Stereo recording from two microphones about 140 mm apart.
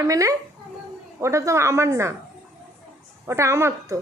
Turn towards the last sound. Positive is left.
turn(degrees=-20)  # may be behind; listen again after turning